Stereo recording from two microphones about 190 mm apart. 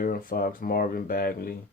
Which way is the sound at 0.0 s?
50° left (ahead or behind).